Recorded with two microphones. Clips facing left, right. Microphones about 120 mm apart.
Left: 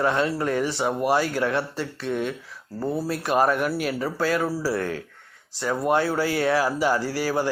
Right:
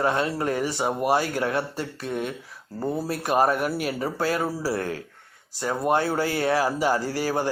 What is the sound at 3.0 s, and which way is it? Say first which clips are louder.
Speech: even; 40° right (ahead or behind).